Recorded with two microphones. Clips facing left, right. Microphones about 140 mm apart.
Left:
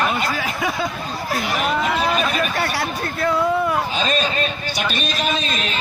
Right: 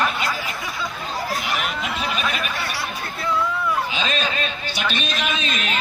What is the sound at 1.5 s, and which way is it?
Chatter, 40° left (ahead or behind).